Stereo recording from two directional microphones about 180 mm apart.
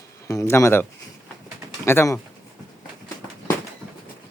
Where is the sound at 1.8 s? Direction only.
15° left (ahead or behind).